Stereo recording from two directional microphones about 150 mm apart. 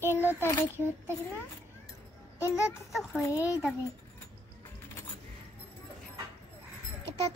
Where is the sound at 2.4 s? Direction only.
20° left (ahead or behind).